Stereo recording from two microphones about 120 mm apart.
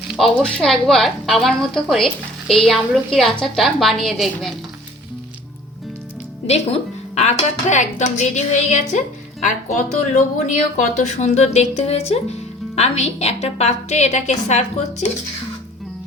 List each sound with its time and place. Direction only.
0.1 s speech: 5° left (ahead or behind)
7.2 s speech: 75° left (ahead or behind)
9.4 s speech: 90° left; by 15.0 s 75° left (ahead or behind)